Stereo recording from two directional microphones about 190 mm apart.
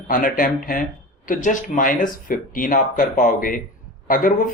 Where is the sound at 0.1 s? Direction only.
45° left (ahead or behind).